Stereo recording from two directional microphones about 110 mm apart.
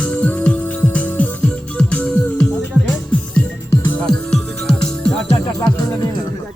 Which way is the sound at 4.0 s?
5° left (ahead or behind).